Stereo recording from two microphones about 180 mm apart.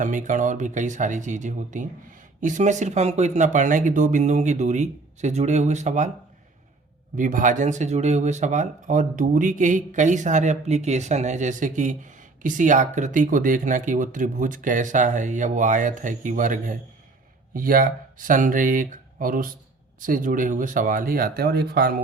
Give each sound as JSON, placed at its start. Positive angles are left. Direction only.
{"t": 0.0, "sound": "speech", "side_deg": -45}
{"t": 7.2, "sound": "speech", "side_deg": -45}